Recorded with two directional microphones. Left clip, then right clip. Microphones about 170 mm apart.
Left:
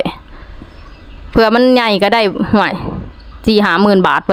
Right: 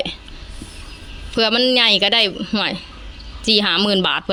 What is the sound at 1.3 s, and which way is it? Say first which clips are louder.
Speech: left 6 dB; 45° left (ahead or behind).